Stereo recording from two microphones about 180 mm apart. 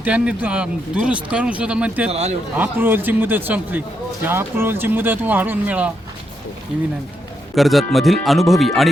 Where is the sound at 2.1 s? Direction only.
35° right (ahead or behind).